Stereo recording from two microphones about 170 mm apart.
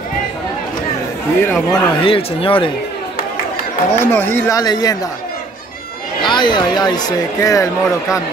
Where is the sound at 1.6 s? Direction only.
30° left (ahead or behind).